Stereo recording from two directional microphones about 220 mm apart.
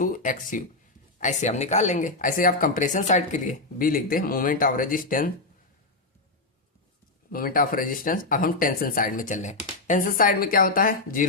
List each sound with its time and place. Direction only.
0.0 s speech: 35° left (ahead or behind)
7.3 s speech: 40° left (ahead or behind)